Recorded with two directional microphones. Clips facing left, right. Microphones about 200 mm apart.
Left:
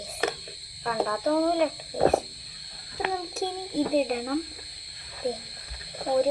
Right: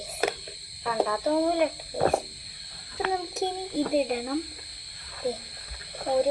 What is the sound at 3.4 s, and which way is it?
Child singing, 20° right (ahead or behind).